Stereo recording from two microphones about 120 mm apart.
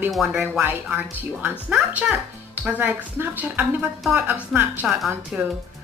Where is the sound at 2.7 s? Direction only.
15° right (ahead or behind).